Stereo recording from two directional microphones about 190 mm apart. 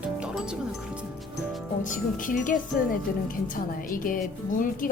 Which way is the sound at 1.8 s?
45° left (ahead or behind).